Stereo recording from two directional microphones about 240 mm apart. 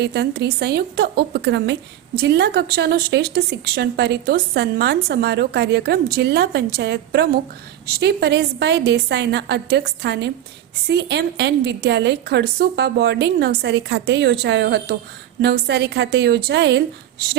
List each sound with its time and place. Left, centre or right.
0.0 s speech: right